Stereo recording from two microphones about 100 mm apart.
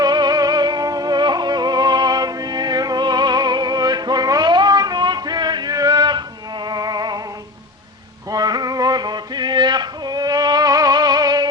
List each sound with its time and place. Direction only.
0.0 s music: 45° right (ahead or behind)
8.3 s male singing: 40° right (ahead or behind)